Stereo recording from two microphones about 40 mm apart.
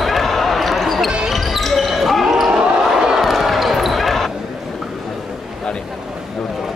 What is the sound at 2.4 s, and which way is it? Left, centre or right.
Basketball bounce, centre.